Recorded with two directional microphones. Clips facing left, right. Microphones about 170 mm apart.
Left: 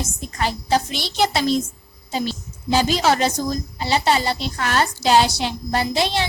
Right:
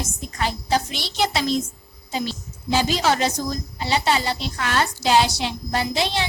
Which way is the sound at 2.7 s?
40° left (ahead or behind).